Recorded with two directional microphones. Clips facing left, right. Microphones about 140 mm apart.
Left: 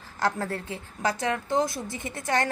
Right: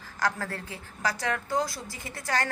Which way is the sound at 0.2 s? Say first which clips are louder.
Left 3 dB; 25° left (ahead or behind).